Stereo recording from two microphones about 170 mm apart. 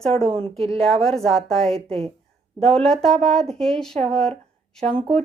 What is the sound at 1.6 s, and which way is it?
Speech, 35° right (ahead or behind).